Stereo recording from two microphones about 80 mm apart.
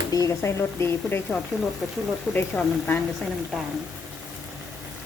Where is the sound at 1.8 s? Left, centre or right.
Centre.